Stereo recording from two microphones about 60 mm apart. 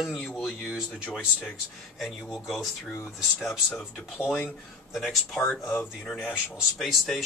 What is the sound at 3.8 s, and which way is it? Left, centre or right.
Speech, centre.